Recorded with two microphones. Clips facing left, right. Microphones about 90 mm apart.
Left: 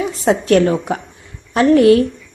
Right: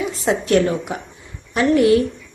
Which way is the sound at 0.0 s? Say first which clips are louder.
Left 4 dB; 40° left (ahead or behind).